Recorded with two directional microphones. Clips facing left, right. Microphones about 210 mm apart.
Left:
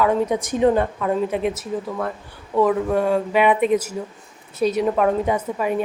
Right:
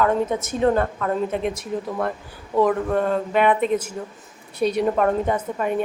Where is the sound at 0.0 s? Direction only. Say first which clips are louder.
Left 1 dB; 10° left (ahead or behind).